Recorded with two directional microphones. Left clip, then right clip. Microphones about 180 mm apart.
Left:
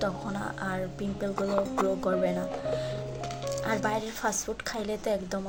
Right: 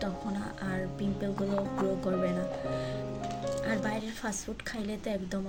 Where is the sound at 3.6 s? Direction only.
20° right (ahead or behind).